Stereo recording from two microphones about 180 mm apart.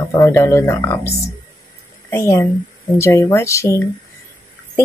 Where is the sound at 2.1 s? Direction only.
15° left (ahead or behind).